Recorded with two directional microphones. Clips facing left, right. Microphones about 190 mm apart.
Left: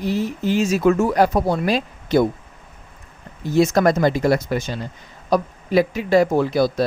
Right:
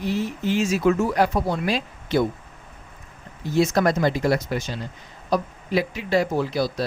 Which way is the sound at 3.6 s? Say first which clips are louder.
Left 4 dB; 50° left (ahead or behind).